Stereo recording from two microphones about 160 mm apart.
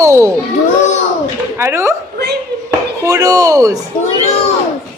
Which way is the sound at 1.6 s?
15° right (ahead or behind).